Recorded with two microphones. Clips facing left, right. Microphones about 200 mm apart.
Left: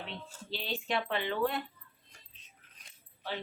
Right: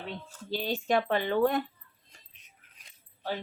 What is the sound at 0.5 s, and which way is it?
Speech, 45° right (ahead or behind).